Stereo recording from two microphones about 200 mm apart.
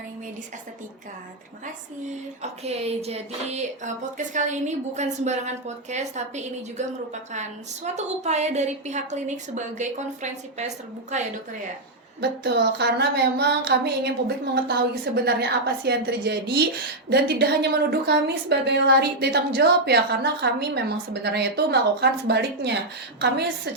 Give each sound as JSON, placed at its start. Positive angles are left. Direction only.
{"t": 2.4, "sound": "a woman's voice", "side_deg": -30}
{"t": 11.1, "sound": "a woman's voice", "side_deg": -35}
{"t": 12.2, "sound": "a woman's voice", "side_deg": -55}